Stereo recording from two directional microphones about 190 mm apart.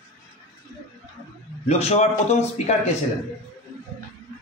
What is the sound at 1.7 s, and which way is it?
A man's voice, 35° left (ahead or behind).